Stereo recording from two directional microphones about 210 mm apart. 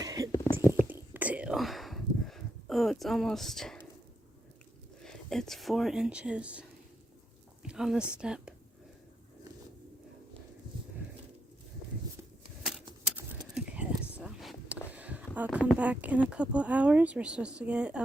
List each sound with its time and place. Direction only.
0.0 s whispering: 15° right (ahead or behind)
0.5 s a sound: 10° right (ahead or behind)
0.9 s whispering: 10° right (ahead or behind)
5.0 s a woman's voice: centre (ahead or behind)
13.7 s a sound: 5° right (ahead or behind)
15.5 s speech: 5° right (ahead or behind)